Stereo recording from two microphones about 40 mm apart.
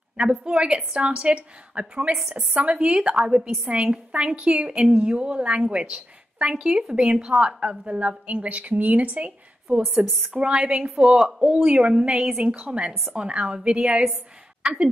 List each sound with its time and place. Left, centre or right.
0.3 s a woman's voice: right
3.6 s a woman's voice: right
10.0 s a woman's voice: centre
10.3 s a woman's voice: right
11.0 s speech: centre
11.2 s a woman's voice: right